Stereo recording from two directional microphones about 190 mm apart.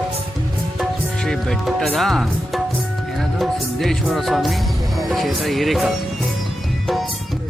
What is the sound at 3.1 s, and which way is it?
Speech, centre (ahead or behind).